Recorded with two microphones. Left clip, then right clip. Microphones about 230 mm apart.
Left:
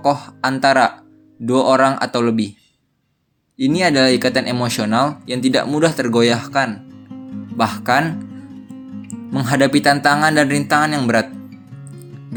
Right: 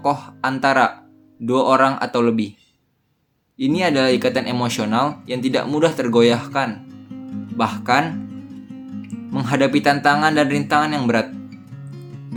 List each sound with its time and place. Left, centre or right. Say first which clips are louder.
0.0 s speech: left 3 dB; centre
3.6 s speech: left 3 dB; centre
6.8 s music: even; centre
7.5 s speech: left 2 dB; left
8.1 s music: even; centre
9.3 s speech: left 3 dB; left
11.3 s music: even; centre